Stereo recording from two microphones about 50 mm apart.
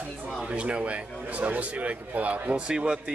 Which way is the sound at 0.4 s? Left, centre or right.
Right.